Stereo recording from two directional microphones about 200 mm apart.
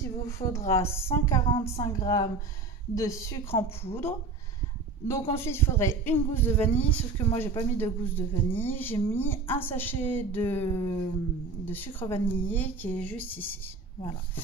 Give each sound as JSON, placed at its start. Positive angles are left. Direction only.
{"t": 0.5, "sound": "speech", "side_deg": 15}
{"t": 3.6, "sound": "a woman's voice", "side_deg": 30}
{"t": 5.0, "sound": "speech", "side_deg": 15}